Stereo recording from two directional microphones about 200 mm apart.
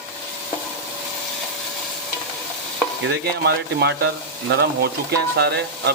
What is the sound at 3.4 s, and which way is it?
Speech, 55° right (ahead or behind).